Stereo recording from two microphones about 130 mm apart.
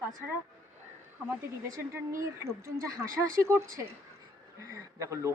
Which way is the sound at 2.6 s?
25° right (ahead or behind).